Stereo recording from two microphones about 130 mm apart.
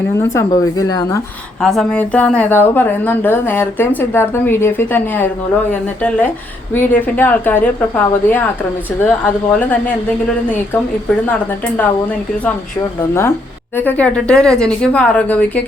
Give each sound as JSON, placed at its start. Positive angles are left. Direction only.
{"t": 0.2, "sound": "speech", "side_deg": 25}
{"t": 1.6, "sound": "speech", "side_deg": 5}
{"t": 13.0, "sound": "speech", "side_deg": 20}